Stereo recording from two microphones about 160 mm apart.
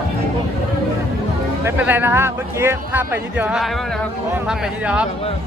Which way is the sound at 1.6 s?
10° right (ahead or behind).